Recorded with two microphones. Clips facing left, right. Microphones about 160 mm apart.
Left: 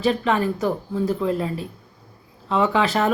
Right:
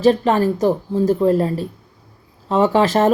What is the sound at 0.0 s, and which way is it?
Speech, 40° right (ahead or behind).